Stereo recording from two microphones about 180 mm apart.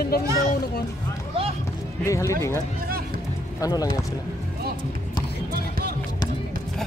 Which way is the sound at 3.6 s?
20° left (ahead or behind).